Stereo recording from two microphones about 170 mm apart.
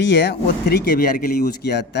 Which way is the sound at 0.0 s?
75° left (ahead or behind).